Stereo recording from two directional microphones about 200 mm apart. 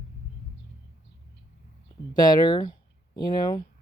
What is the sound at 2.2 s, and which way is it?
Speech, 20° left (ahead or behind).